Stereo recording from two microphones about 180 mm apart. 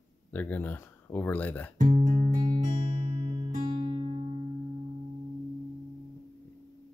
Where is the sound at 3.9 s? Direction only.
35° right (ahead or behind).